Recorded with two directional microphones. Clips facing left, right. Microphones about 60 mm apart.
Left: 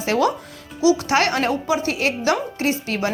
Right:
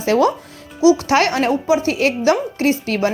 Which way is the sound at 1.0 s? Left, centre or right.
Right.